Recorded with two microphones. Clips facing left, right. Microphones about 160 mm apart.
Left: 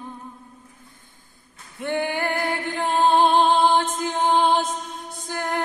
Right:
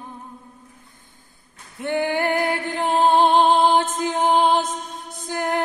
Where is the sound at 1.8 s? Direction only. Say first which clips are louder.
Right 3 dB; 20° right (ahead or behind).